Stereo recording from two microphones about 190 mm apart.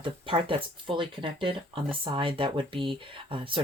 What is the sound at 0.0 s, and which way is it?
Speech, 25° right (ahead or behind).